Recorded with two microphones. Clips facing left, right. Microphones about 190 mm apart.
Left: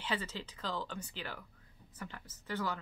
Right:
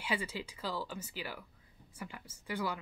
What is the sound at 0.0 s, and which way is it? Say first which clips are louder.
Speech: right 1 dB; 10° right (ahead or behind).